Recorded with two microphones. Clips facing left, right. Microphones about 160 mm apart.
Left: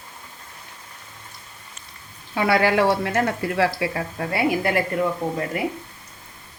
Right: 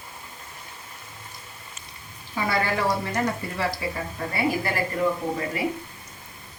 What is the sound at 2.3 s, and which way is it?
A woman's voice, 75° left (ahead or behind).